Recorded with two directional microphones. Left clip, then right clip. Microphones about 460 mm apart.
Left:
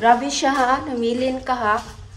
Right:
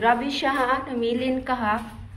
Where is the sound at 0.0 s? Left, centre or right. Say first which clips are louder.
Left 5 dB; centre.